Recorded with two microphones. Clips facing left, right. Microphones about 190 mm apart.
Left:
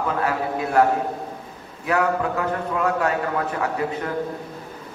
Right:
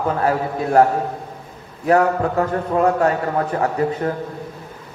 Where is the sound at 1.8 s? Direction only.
40° right (ahead or behind).